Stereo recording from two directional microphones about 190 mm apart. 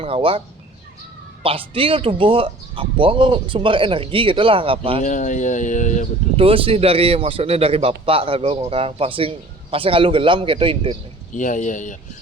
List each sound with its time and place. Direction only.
0.0 s a man's voice: 30° right (ahead or behind)
5.0 s speech: 40° left (ahead or behind)
6.3 s a man's voice: 30° right (ahead or behind)
11.3 s speech: 40° left (ahead or behind)